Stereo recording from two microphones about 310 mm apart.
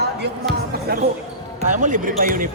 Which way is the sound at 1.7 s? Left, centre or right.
Right.